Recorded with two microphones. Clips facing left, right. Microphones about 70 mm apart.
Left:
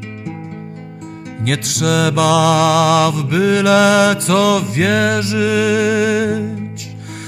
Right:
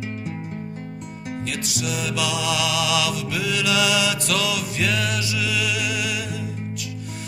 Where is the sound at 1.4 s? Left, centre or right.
Left.